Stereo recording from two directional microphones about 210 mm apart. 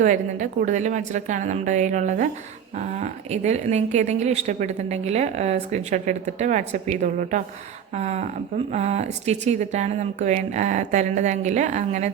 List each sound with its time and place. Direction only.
0.0 s a woman's voice: 35° right (ahead or behind)